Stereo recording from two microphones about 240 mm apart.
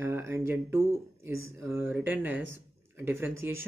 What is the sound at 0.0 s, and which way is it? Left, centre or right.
Speech, centre.